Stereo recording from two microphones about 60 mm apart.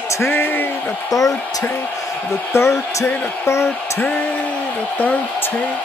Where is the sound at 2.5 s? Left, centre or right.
Left.